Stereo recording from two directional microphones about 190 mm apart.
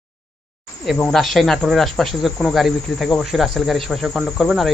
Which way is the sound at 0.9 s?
5° left (ahead or behind).